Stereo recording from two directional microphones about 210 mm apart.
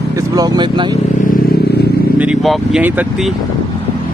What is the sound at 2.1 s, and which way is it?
Speech, 5° right (ahead or behind).